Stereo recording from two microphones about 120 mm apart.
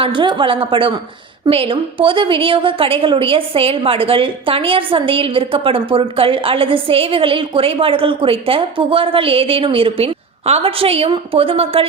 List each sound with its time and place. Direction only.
0.0 s a woman's voice: 45° right (ahead or behind)